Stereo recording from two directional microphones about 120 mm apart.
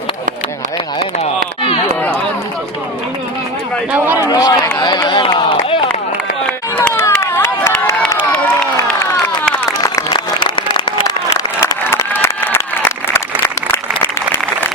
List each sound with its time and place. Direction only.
3.9 s speech: 15° right (ahead or behind)
4.2 s run: 30° left (ahead or behind)
4.8 s a sound: 35° left (ahead or behind)
6.9 s a sound: 20° left (ahead or behind)
9.6 s applause: 30° left (ahead or behind)
10.1 s applause: 40° left (ahead or behind)
11.9 s applause: 20° left (ahead or behind)